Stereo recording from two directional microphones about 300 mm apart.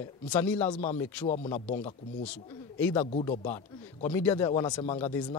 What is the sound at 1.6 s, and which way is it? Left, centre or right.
Speech, left.